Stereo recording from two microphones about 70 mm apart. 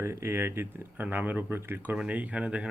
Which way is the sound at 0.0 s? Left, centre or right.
Right.